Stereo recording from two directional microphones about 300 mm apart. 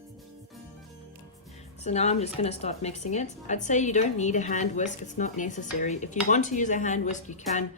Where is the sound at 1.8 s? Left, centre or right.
Left.